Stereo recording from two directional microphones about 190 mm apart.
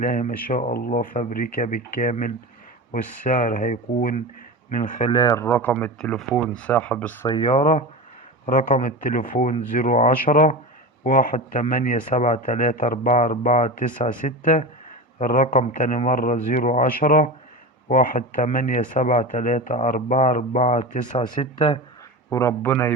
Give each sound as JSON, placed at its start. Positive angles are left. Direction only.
{"t": 0.0, "sound": "speech", "side_deg": 45}
{"t": 4.9, "sound": "speech", "side_deg": 25}
{"t": 7.3, "sound": "speech", "side_deg": 25}
{"t": 8.4, "sound": "speech", "side_deg": 45}
{"t": 22.3, "sound": "speech", "side_deg": 15}